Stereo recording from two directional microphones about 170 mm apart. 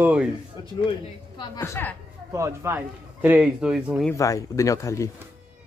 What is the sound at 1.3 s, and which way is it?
Speech, 20° left (ahead or behind).